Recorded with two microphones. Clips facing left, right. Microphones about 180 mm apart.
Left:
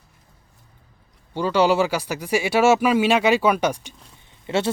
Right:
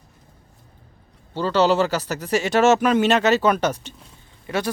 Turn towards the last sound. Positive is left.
turn(degrees=25)  # may be behind; listen again after turning